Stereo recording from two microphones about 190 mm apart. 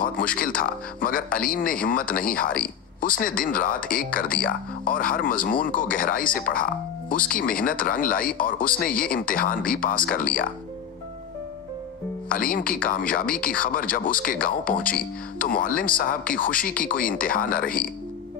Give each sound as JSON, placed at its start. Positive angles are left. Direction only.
{"t": 0.0, "sound": "speech", "side_deg": 45}
{"t": 12.3, "sound": "speech", "side_deg": 50}